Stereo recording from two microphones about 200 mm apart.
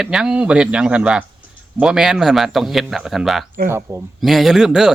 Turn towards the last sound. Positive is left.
turn(degrees=0)  # may be behind; listen again after turning